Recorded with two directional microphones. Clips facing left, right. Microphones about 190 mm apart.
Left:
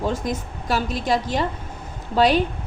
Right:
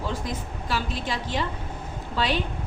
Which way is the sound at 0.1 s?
45° left (ahead or behind).